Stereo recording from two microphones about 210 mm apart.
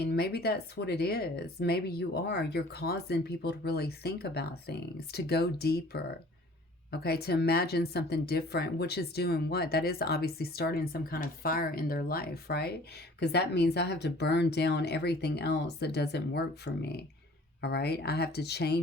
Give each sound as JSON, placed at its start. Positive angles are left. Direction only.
{"t": 0.0, "sound": "speech", "side_deg": 50}